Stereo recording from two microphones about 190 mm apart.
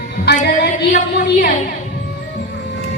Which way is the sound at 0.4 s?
60° left (ahead or behind).